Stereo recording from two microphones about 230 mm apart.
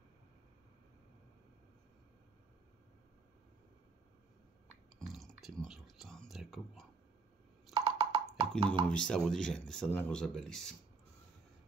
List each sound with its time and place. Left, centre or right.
5.0 s a sound: centre
5.6 s whispering: centre
7.7 s wood block: right
8.8 s speech: centre